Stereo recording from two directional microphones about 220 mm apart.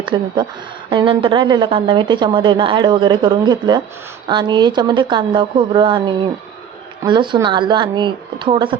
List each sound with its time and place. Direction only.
0.0 s a woman's voice: 20° right (ahead or behind)